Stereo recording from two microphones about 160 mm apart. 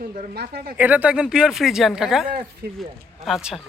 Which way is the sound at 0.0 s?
55° right (ahead or behind).